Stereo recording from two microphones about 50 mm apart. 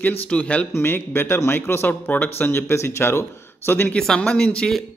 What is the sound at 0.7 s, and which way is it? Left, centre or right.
A man's voice, left.